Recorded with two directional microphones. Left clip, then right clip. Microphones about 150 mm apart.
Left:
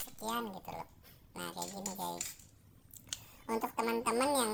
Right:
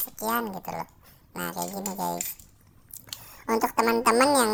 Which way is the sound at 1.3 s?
50° right (ahead or behind).